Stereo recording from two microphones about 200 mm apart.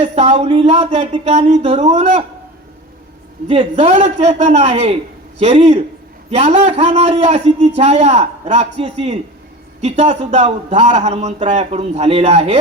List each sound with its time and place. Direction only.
0.0 s a man's voice: 30° right (ahead or behind)
3.5 s a man's voice: 30° right (ahead or behind)